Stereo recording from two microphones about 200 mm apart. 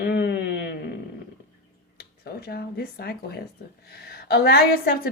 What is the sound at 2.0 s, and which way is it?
Speech, 50° left (ahead or behind).